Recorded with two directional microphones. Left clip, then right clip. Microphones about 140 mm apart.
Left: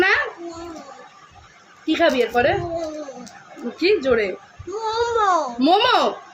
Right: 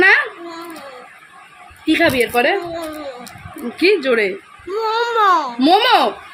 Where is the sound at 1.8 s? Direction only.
55° right (ahead or behind).